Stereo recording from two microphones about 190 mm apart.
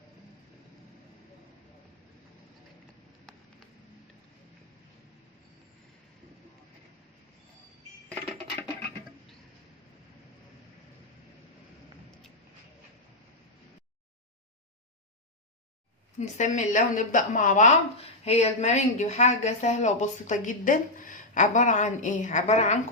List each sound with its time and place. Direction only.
16.2 s a woman's voice: 40° left (ahead or behind)